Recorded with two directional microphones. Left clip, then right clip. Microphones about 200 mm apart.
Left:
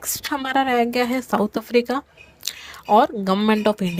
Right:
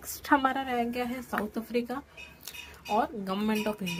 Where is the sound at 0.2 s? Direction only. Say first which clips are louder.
Left 4 dB; 45° left (ahead or behind).